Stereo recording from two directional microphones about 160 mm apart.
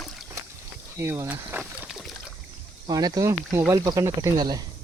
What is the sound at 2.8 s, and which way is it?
Speech, 25° right (ahead or behind).